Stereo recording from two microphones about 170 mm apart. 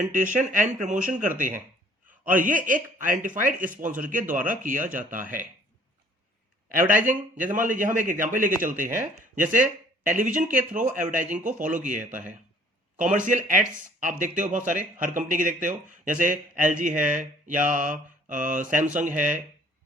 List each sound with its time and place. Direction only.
0.1 s speech: 50° right (ahead or behind)
6.7 s speech: 50° right (ahead or behind)